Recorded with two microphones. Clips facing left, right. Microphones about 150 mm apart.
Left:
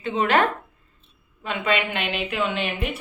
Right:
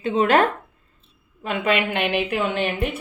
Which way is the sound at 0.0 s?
40° right (ahead or behind).